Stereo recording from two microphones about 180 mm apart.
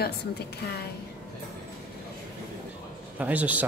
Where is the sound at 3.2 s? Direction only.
10° right (ahead or behind).